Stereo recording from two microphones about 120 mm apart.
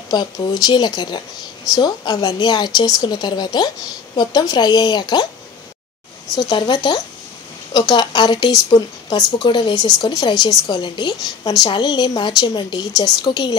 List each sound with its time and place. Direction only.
0.1 s speech: 35° left (ahead or behind)
6.3 s speech: 35° left (ahead or behind)